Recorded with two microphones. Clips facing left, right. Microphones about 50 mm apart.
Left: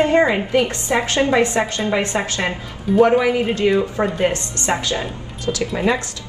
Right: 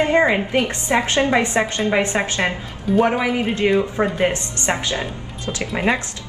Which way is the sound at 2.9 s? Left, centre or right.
Centre.